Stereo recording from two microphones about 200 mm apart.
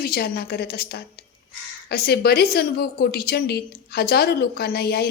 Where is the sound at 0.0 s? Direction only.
50° left (ahead or behind).